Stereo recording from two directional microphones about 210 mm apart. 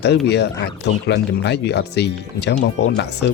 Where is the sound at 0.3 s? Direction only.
55° left (ahead or behind).